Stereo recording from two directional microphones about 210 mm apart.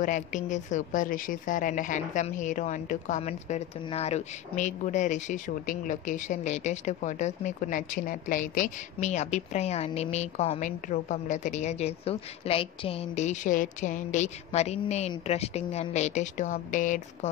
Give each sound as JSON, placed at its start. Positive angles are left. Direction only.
{"t": 0.0, "sound": "a woman's voice", "side_deg": 35}